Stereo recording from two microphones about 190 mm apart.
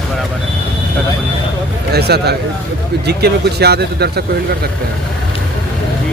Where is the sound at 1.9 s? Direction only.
60° right (ahead or behind).